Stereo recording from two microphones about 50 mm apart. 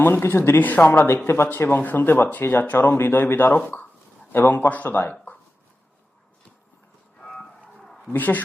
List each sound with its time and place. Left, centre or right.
0.0 s speech: left
0.6 s speech: left
0.9 s speech: left
3.0 s speech: left
8.1 s speech: left